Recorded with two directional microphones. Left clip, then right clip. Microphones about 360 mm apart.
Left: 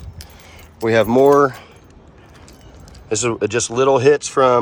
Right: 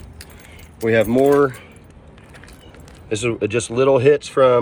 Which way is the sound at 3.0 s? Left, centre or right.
Centre.